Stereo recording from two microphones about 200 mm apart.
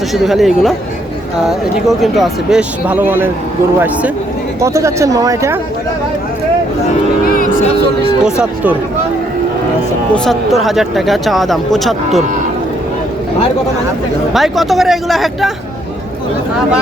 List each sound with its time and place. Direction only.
0.1 s speech: centre (ahead or behind)
7.3 s music: 45° left (ahead or behind)
8.2 s speech: 5° right (ahead or behind)
10.2 s speech: centre (ahead or behind)
14.3 s speech: centre (ahead or behind)